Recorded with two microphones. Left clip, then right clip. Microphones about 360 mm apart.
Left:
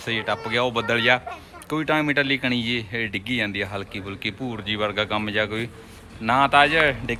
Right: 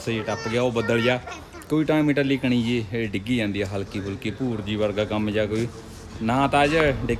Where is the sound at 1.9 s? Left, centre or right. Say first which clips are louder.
Left 2 dB; centre.